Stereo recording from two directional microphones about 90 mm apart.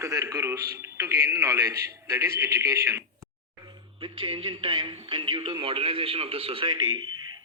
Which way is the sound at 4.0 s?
75° right (ahead or behind).